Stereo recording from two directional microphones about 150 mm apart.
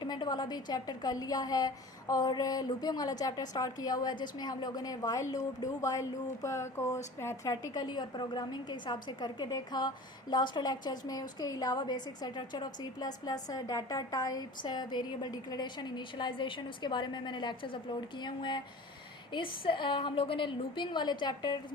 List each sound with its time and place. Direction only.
0.0 s a woman's voice: 25° left (ahead or behind)